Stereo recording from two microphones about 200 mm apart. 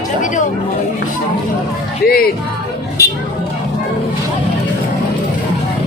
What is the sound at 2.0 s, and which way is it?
Speech, 50° left (ahead or behind).